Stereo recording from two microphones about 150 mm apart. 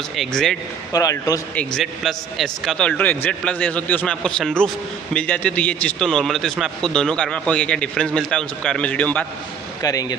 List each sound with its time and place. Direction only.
0.1 s a man's voice: centre (ahead or behind)
0.9 s speech: 25° left (ahead or behind)
1.5 s a man's voice: 5° left (ahead or behind)
9.8 s speech: 25° left (ahead or behind)